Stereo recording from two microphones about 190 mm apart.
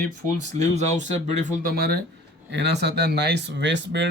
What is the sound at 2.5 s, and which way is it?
Speech, 65° right (ahead or behind).